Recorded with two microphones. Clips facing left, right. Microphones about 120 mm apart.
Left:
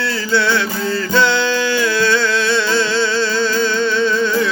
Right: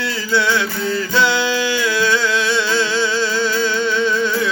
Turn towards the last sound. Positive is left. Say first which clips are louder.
# left 2 dB
turn(degrees=-15)  # may be behind; listen again after turning